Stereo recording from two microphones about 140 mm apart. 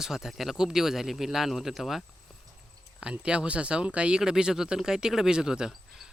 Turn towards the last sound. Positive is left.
turn(degrees=-5)  # may be behind; listen again after turning